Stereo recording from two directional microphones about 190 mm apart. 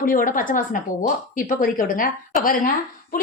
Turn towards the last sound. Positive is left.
turn(degrees=45)  # may be behind; listen again after turning